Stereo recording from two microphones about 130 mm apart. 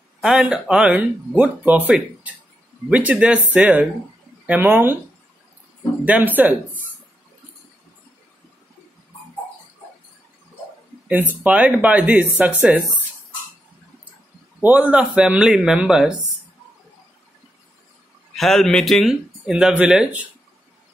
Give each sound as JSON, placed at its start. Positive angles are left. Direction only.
{"t": 0.2, "sound": "speech", "side_deg": -5}
{"t": 6.0, "sound": "speech", "side_deg": -10}
{"t": 11.1, "sound": "speech", "side_deg": -10}
{"t": 14.6, "sound": "speech", "side_deg": -10}
{"t": 18.3, "sound": "speech", "side_deg": 0}